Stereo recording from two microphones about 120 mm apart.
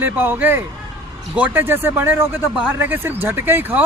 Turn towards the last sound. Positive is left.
turn(degrees=-15)  # may be behind; listen again after turning